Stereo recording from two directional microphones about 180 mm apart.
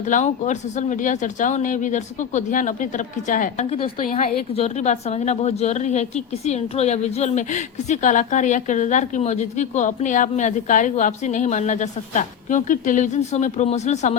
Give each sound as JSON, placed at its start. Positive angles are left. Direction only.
{"t": 0.1, "sound": "a woman's voice", "side_deg": 40}